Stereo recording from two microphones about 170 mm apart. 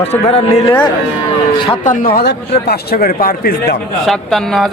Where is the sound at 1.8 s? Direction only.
50° left (ahead or behind).